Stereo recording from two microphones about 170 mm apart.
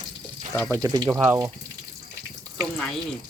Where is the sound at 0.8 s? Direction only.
20° right (ahead or behind).